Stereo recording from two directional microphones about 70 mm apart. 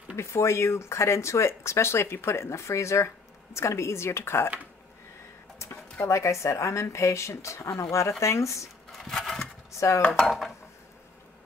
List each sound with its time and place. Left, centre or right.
0.1 s speech: left
5.6 s speech: left
8.9 s a sound: centre
9.8 s dishes: left
10.0 s dishes: centre